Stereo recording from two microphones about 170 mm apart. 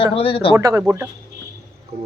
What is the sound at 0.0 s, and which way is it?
Speech, 35° left (ahead or behind).